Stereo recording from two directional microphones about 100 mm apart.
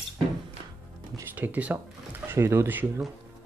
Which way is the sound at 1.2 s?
15° right (ahead or behind).